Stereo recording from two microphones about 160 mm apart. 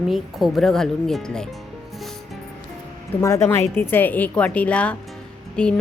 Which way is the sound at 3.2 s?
20° left (ahead or behind).